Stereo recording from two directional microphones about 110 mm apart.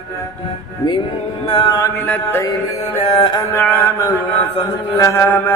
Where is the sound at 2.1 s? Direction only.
20° left (ahead or behind).